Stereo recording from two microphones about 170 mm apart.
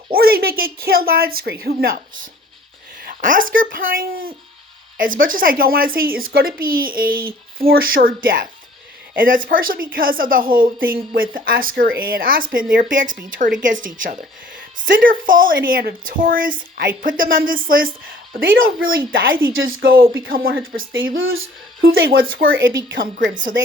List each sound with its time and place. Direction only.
0.1 s a woman's voice: 60° right (ahead or behind)
21.8 s a woman's voice: 60° right (ahead or behind); by 23.0 s 90° right